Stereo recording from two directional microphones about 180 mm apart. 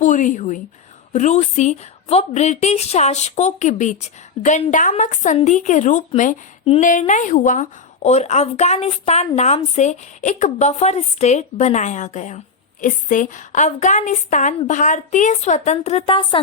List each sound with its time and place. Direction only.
0.0 s a woman's voice: 45° left (ahead or behind); by 16.4 s 30° left (ahead or behind)